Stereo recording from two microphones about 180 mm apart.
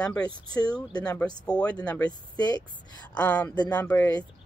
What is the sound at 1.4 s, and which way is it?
Speech, 5° left (ahead or behind).